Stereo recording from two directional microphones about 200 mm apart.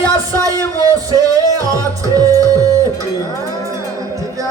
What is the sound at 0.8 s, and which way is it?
Speech, 15° right (ahead or behind).